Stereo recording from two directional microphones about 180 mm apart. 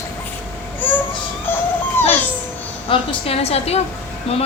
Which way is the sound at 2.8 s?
35° left (ahead or behind).